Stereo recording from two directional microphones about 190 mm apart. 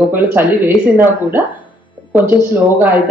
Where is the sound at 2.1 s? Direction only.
10° right (ahead or behind).